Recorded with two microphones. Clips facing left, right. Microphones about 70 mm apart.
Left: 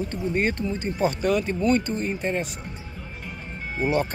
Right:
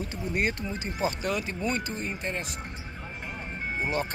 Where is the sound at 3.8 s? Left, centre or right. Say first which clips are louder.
Left 7 dB; centre.